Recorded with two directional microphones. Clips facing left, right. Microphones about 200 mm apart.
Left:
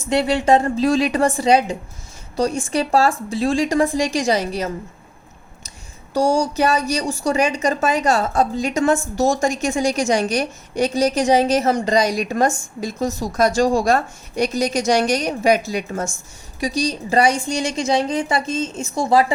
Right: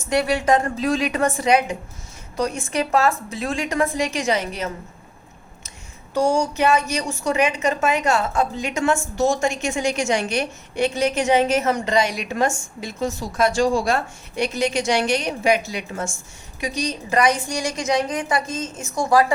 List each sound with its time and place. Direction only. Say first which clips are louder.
0.1 s a woman's voice: left 3 dB; 25° left (ahead or behind)
6.1 s a woman's voice: left 2 dB; 35° left (ahead or behind)